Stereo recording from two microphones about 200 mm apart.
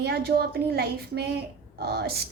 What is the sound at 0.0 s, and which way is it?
A woman's voice, 50° right (ahead or behind).